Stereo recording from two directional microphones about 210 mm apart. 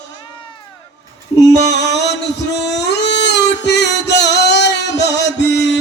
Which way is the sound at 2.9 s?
55° left (ahead or behind).